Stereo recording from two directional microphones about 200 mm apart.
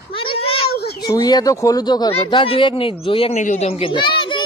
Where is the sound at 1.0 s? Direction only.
20° left (ahead or behind).